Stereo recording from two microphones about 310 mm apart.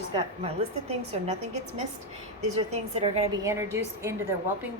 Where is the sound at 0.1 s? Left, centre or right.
Centre.